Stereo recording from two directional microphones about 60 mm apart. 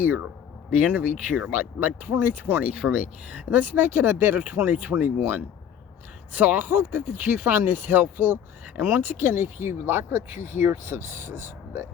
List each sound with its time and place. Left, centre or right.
0.0 s speech: right
2.7 s speech: centre; by 4.4 s right
4.4 s speech: right